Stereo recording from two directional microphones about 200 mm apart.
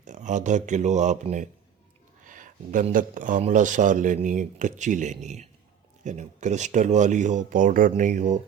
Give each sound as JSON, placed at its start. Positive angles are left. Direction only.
{"t": 0.0, "sound": "speech", "side_deg": -35}